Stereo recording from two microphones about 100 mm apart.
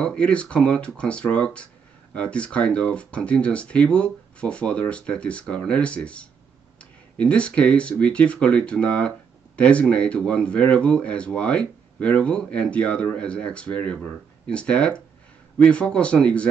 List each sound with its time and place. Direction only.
0.0 s speech: 10° left (ahead or behind)